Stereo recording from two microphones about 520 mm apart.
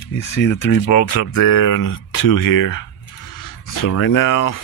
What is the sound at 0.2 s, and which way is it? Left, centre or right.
Speech, left.